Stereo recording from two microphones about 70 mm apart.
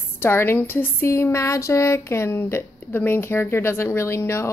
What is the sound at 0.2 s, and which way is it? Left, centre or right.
A woman's voice, left.